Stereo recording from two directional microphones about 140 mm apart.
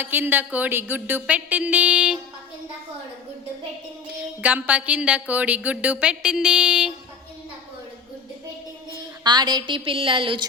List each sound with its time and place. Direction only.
0.0 s speech: 15° right (ahead or behind)
4.2 s speech: 10° right (ahead or behind)
9.2 s a woman's voice: 30° right (ahead or behind)